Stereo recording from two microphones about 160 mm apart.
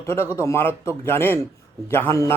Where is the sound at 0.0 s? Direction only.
15° left (ahead or behind).